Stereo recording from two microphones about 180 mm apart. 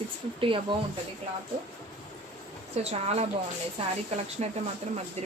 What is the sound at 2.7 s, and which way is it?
Speech, 35° right (ahead or behind).